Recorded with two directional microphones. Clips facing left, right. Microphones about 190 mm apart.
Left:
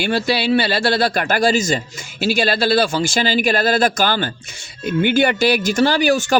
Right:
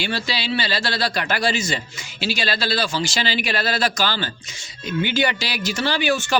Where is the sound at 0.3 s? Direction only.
55° left (ahead or behind).